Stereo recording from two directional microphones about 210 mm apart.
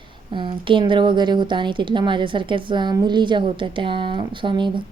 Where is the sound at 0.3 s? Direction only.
25° right (ahead or behind).